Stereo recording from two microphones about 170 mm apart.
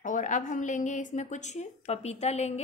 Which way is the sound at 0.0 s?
50° left (ahead or behind).